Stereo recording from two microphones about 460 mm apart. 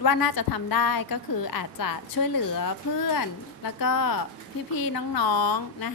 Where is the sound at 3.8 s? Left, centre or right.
Left.